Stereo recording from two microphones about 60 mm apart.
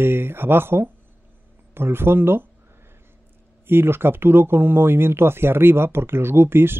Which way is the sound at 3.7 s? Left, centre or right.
Right.